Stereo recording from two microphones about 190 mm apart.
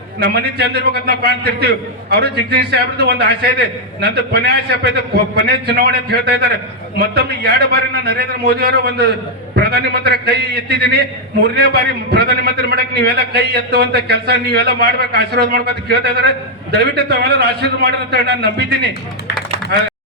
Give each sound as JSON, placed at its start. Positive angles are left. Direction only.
{"t": 0.2, "sound": "a man's voice", "side_deg": -55}